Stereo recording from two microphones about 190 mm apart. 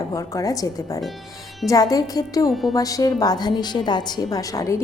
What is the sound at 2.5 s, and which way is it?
Speech, centre (ahead or behind).